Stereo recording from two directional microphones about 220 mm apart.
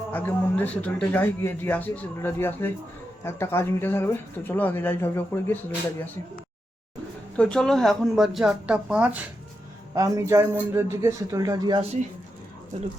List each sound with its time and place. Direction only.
0.1 s speech: 10° left (ahead or behind)
7.3 s speech: 5° left (ahead or behind); by 11.9 s 25° right (ahead or behind)